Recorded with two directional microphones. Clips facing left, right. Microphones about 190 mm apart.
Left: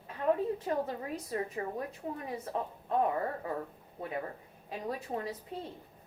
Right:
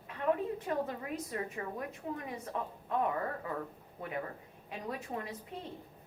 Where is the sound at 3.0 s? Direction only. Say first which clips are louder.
Left 3 dB; 30° left (ahead or behind).